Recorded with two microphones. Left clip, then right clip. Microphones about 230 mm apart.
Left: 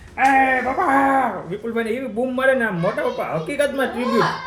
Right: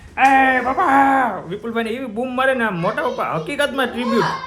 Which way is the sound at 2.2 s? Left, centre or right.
Centre.